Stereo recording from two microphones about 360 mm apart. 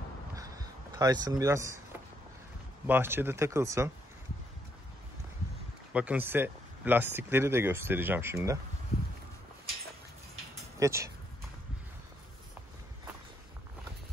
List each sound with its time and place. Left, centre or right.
0.9 s speech: centre
5.9 s speech: centre
10.8 s speech: centre